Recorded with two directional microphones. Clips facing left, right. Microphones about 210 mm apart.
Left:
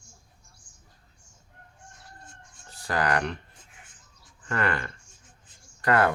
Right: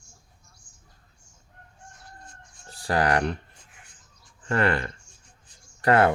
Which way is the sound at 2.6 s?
30° right (ahead or behind).